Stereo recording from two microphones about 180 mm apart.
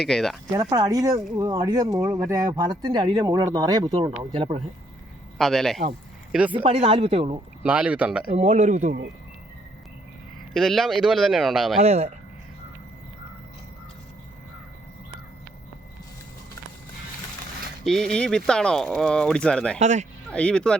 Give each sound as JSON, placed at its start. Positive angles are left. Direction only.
{"t": 0.0, "sound": "speech", "side_deg": 0}
{"t": 0.7, "sound": "speech", "side_deg": -20}
{"t": 5.4, "sound": "speech", "side_deg": 0}
{"t": 6.5, "sound": "speech", "side_deg": -30}
{"t": 7.6, "sound": "speech", "side_deg": -5}
{"t": 8.4, "sound": "speech", "side_deg": -40}
{"t": 10.5, "sound": "speech", "side_deg": 0}
{"t": 11.8, "sound": "speech", "side_deg": -35}
{"t": 17.8, "sound": "speech", "side_deg": 0}
{"t": 19.8, "sound": "speech", "side_deg": -40}
{"t": 20.3, "sound": "speech", "side_deg": 5}